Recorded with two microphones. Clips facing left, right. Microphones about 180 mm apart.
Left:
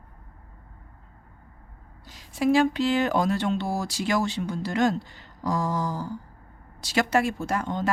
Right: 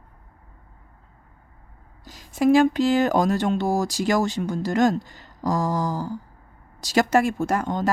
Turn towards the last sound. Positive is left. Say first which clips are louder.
# right 4 dB
turn(degrees=-45)  # may be behind; listen again after turning